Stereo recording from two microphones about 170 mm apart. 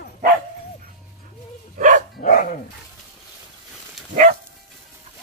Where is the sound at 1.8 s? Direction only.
50° right (ahead or behind).